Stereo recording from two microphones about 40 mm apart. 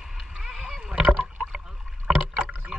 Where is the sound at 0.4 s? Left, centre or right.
Centre.